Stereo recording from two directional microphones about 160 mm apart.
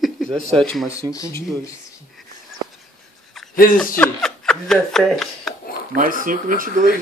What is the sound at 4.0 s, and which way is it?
Speech, 5° left (ahead or behind).